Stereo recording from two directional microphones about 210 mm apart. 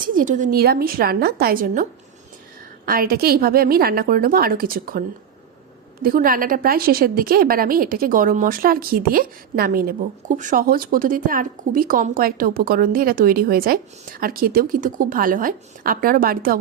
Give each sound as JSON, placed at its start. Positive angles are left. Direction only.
{"t": 0.0, "sound": "a woman's voice", "side_deg": -40}